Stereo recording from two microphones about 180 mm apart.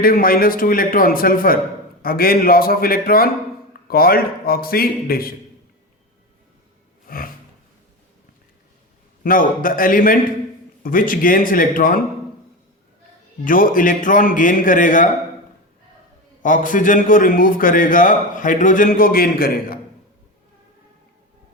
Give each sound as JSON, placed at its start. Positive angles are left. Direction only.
{"t": 0.0, "sound": "a man's voice", "side_deg": 50}
{"t": 7.1, "sound": "gasp", "side_deg": 55}
{"t": 9.2, "sound": "a man's voice", "side_deg": 50}
{"t": 13.4, "sound": "a man's voice", "side_deg": 50}
{"t": 16.4, "sound": "a man's voice", "side_deg": 45}